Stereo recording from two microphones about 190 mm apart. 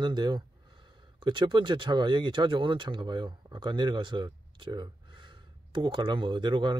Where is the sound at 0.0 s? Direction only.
20° right (ahead or behind).